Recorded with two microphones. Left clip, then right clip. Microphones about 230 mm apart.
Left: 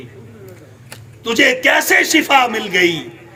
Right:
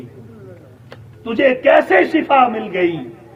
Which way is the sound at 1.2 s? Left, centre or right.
Centre.